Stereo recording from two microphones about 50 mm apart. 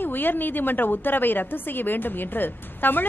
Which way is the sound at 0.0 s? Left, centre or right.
Left.